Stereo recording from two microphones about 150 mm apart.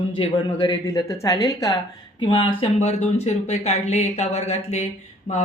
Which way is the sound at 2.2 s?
35° left (ahead or behind).